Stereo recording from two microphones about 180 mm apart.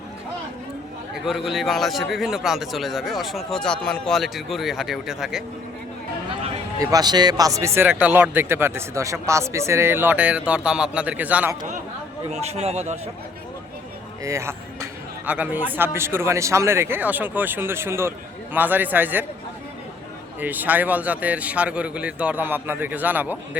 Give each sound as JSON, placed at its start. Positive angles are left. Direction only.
{"t": 1.3, "sound": "a man's voice", "side_deg": 0}
{"t": 6.7, "sound": "speech", "side_deg": -20}
{"t": 12.3, "sound": "a man's voice", "side_deg": -35}
{"t": 14.3, "sound": "speech", "side_deg": -15}
{"t": 20.4, "sound": "speech", "side_deg": -10}